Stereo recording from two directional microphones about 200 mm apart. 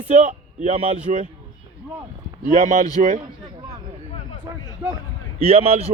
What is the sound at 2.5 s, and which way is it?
Speech, 40° right (ahead or behind).